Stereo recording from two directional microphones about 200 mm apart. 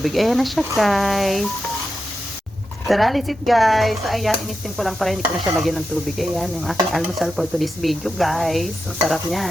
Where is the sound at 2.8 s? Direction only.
Centre (ahead or behind).